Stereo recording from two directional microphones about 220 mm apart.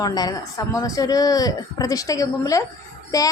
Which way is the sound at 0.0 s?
15° left (ahead or behind).